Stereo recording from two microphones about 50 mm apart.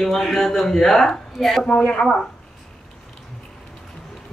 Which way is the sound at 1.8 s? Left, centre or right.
Left.